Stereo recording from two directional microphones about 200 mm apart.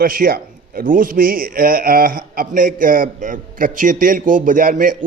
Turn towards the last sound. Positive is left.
turn(degrees=-45)  # may be behind; listen again after turning